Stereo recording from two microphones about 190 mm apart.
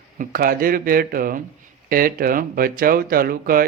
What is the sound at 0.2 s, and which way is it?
Speech, 45° right (ahead or behind).